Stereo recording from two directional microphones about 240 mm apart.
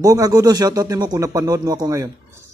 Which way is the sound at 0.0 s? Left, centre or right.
Centre.